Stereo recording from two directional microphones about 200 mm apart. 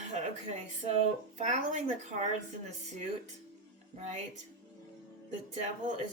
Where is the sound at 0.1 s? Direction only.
35° right (ahead or behind).